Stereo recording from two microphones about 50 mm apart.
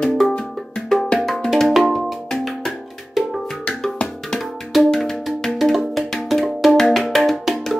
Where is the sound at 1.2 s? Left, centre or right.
Centre.